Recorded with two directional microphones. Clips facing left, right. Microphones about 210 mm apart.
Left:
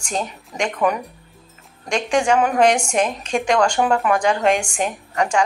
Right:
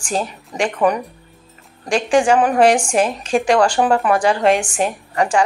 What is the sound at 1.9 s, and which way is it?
A woman's voice, 5° right (ahead or behind).